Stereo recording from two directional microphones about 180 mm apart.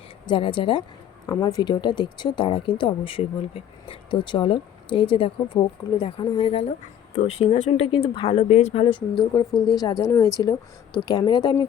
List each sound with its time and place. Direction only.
0.3 s speech: 25° left (ahead or behind)